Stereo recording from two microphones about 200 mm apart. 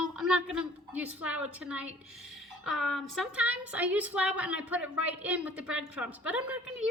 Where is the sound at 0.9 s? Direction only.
5° right (ahead or behind).